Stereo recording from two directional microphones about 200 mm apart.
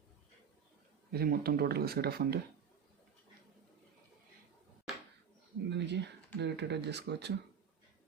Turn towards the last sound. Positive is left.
turn(degrees=-60)  # may be behind; listen again after turning